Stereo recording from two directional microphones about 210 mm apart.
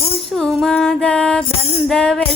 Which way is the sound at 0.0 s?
Centre (ahead or behind).